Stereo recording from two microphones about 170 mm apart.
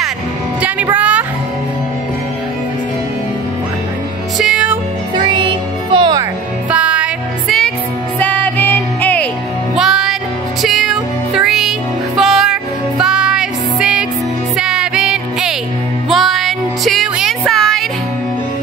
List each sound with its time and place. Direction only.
0.9 s music: 10° right (ahead or behind)
4.4 s music: 5° right (ahead or behind)
5.1 s music: 30° right (ahead or behind)
6.7 s music: 5° right (ahead or behind); by 9.3 s 10° left (ahead or behind)
9.8 s music: centre (ahead or behind)